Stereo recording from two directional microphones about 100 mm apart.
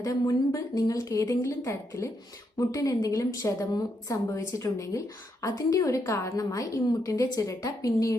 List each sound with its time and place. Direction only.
0.0 s a woman's voice: 35° left (ahead or behind)